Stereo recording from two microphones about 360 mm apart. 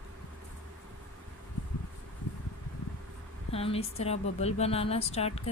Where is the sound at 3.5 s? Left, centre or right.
Centre.